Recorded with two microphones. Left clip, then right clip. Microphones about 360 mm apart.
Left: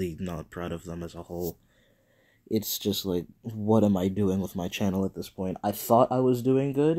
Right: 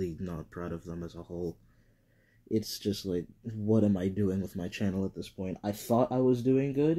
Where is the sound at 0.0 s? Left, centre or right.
Centre.